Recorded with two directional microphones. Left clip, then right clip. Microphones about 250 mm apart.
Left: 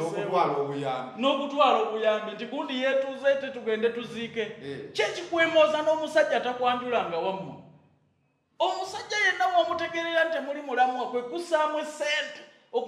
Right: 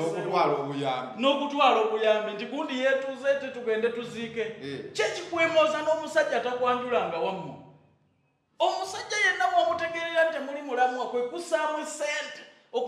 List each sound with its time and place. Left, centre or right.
0.3 s a man's voice: right
1.1 s a man's voice: centre
8.5 s a man's voice: centre